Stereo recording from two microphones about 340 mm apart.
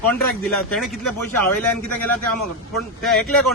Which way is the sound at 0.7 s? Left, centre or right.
Centre.